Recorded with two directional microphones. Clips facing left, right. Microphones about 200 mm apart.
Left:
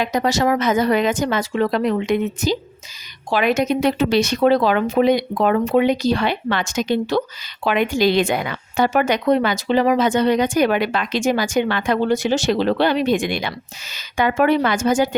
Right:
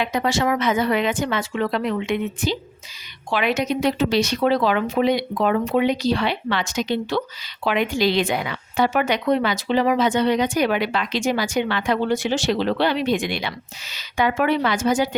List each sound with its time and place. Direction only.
0.0 s a woman's voice: 40° left (ahead or behind)